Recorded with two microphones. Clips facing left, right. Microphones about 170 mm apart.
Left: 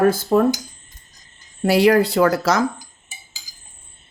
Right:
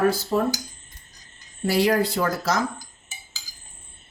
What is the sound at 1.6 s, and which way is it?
Speech, 65° left (ahead or behind).